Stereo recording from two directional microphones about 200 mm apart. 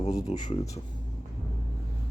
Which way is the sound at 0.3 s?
20° left (ahead or behind).